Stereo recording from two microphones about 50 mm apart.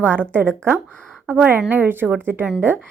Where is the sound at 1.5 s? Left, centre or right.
Right.